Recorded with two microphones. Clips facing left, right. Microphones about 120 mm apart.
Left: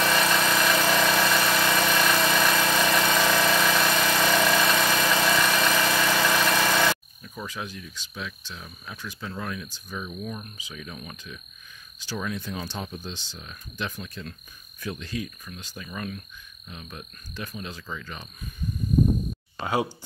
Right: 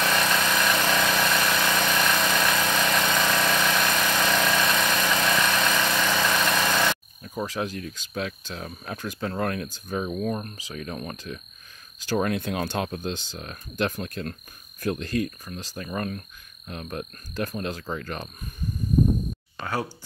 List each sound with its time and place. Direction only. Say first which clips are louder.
0.0 s engine: left 1 dB; centre (ahead or behind)
7.2 s cricket: right 6 dB; 35° right (ahead or behind)
7.8 s speech: right 6 dB; 55° right (ahead or behind)
12.1 s speech: right 7 dB; 60° right (ahead or behind)
15.4 s speech: right 5 dB; 35° right (ahead or behind)
19.6 s speech: left 3 dB; 15° left (ahead or behind)